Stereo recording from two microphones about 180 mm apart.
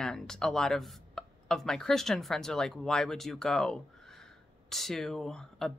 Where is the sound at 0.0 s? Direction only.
5° left (ahead or behind).